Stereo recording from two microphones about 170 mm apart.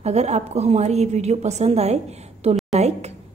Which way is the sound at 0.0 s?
40° right (ahead or behind).